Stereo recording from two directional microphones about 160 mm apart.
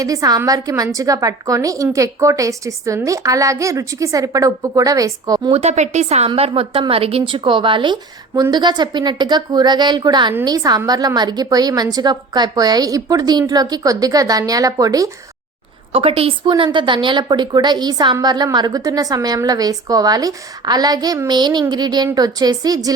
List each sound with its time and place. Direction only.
0.0 s a woman's voice: 20° right (ahead or behind)
5.6 s a woman's voice: 45° right (ahead or behind); by 15.1 s 20° right (ahead or behind)
15.9 s a woman's voice: 35° right (ahead or behind)